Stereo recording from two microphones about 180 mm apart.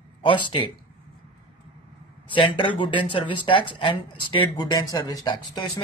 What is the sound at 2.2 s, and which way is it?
Speech, 30° left (ahead or behind).